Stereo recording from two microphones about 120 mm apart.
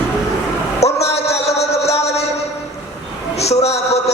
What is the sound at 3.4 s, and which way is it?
Speech, 60° left (ahead or behind).